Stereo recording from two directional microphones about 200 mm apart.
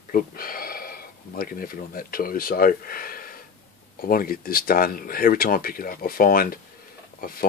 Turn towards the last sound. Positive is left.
turn(degrees=45)  # may be behind; listen again after turning